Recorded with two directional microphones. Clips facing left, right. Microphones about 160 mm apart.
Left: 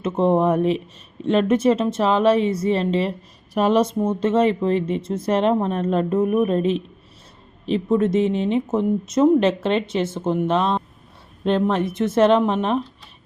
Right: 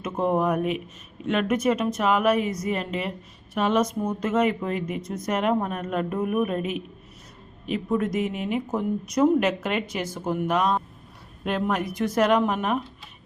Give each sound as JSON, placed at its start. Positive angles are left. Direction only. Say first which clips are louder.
{"t": 0.0, "sound": "speech", "louder": "left 5 dB", "side_deg": 25}